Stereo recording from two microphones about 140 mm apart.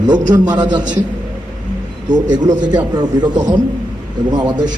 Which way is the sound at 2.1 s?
30° right (ahead or behind).